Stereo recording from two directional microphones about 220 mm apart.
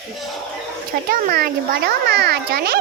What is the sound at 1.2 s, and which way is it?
A child's voice, 45° right (ahead or behind).